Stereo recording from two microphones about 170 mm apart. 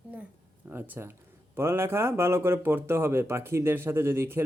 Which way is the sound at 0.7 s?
10° right (ahead or behind).